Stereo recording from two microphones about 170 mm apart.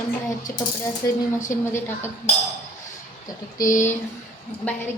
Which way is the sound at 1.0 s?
20° left (ahead or behind).